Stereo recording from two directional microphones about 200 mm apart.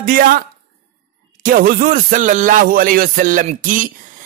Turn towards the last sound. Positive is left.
turn(degrees=-40)  # may be behind; listen again after turning